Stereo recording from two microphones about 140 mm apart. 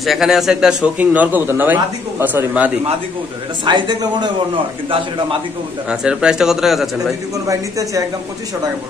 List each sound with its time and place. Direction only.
0.0 s a man's voice: centre (ahead or behind)
3.6 s speech: 35° right (ahead or behind)
5.9 s speech: 5° right (ahead or behind)
7.4 s a woman's voice: 25° right (ahead or behind)